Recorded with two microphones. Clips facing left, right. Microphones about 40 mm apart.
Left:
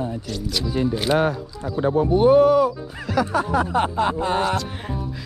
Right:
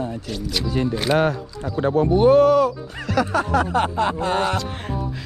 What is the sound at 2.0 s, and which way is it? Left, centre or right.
Speech, centre.